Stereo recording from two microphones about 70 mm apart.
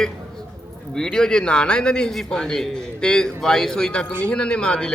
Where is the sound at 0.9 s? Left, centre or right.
Centre.